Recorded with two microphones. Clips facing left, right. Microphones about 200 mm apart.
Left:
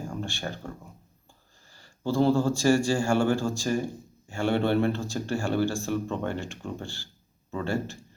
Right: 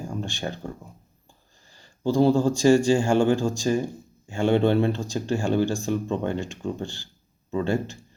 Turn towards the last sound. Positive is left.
turn(degrees=-20)  # may be behind; listen again after turning